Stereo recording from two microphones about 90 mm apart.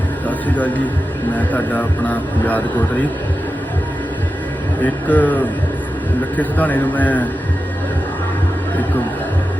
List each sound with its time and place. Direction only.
0.3 s a sound: 15° left (ahead or behind)
1.4 s speech: 15° left (ahead or behind)
4.8 s speech: 15° left (ahead or behind)
6.4 s speech: 20° left (ahead or behind)